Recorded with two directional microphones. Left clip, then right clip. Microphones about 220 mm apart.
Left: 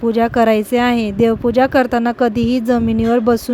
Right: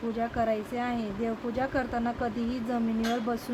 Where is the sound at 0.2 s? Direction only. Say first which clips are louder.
Left 15 dB; 45° left (ahead or behind).